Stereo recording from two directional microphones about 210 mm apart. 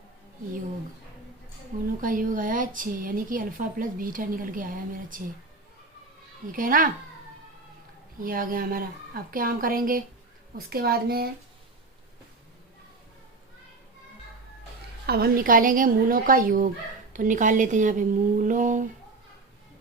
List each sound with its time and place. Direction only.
2.0 s a woman's voice: 40° right (ahead or behind)
6.5 s a woman's voice: 40° right (ahead or behind)
8.2 s a woman's voice: 40° right (ahead or behind)
15.0 s a woman's voice: 50° right (ahead or behind)